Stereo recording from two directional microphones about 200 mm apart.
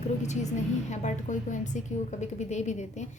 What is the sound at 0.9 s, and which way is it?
A woman's voice, 35° left (ahead or behind).